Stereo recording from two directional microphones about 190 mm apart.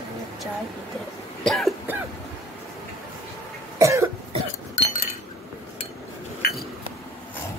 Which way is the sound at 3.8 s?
15° right (ahead or behind).